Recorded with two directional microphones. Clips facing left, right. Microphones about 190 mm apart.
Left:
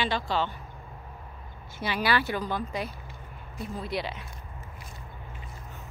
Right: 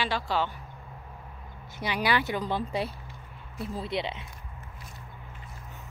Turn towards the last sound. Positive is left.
turn(degrees=-25)  # may be behind; listen again after turning